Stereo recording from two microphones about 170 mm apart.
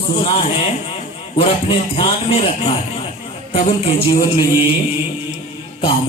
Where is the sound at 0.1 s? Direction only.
35° left (ahead or behind).